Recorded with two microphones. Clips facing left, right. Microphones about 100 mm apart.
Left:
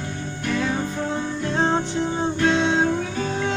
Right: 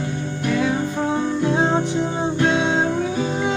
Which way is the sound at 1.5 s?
10° right (ahead or behind).